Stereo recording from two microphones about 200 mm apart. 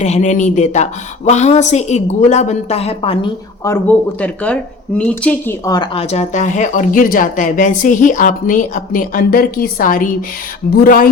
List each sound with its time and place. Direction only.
0.0 s speech: 35° left (ahead or behind)
3.6 s speech: 10° left (ahead or behind); by 11.1 s 45° left (ahead or behind)